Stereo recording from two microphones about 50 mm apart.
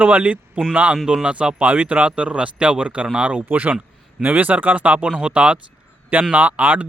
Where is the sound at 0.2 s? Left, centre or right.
Right.